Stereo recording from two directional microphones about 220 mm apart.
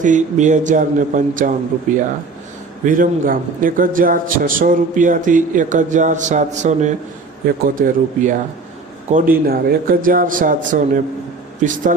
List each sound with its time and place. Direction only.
0.0 s a man's voice: 35° right (ahead or behind)
2.8 s a man's voice: 40° right (ahead or behind)